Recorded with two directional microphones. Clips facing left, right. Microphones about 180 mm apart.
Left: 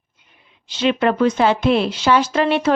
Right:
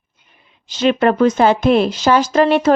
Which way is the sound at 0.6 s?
45° right (ahead or behind).